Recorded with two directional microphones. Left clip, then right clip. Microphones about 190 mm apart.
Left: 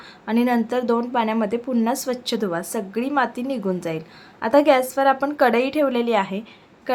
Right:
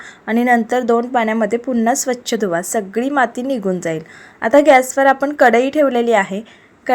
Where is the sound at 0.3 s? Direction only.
20° right (ahead or behind).